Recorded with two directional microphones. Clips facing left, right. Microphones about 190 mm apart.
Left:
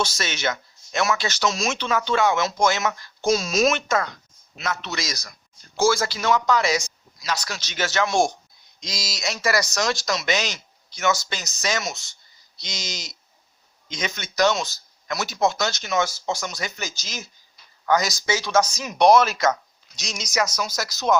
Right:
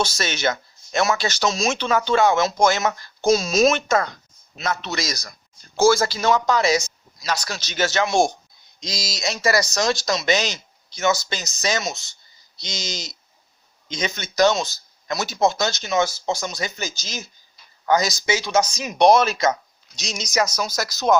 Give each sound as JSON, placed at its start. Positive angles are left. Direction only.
{"t": 0.0, "sound": "speech", "side_deg": -35}